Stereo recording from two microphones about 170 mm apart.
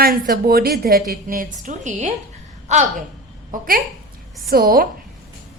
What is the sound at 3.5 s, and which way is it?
A woman's voice, 55° right (ahead or behind).